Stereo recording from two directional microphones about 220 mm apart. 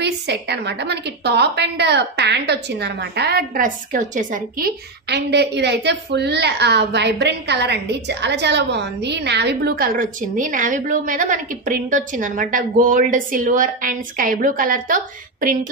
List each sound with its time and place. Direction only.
0.0 s a woman's voice: 50° right (ahead or behind)